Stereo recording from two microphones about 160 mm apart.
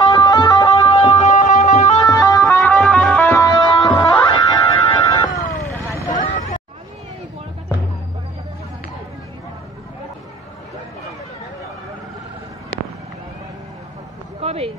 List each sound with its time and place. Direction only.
0.0 s music: 30° left (ahead or behind)
0.7 s music: 40° left (ahead or behind)
2.0 s music: 20° left (ahead or behind)
2.7 s music: 5° left (ahead or behind); by 5.4 s 25° left (ahead or behind)
5.4 s vehicle: 55° left (ahead or behind)
6.1 s a sound: 50° left (ahead or behind)
14.4 s a sound: 40° right (ahead or behind)